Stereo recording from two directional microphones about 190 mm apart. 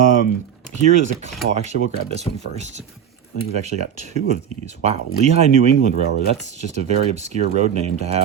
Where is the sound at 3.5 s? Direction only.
35° right (ahead or behind).